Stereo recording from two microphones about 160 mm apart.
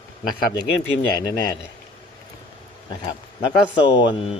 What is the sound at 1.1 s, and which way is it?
Speech, 25° left (ahead or behind).